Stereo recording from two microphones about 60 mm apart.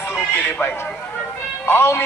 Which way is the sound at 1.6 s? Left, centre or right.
Left.